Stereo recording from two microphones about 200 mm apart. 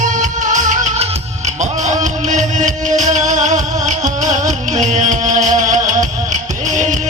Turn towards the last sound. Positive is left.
turn(degrees=-35)  # may be behind; listen again after turning